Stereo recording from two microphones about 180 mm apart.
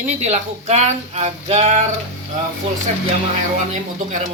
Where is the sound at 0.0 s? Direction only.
40° right (ahead or behind).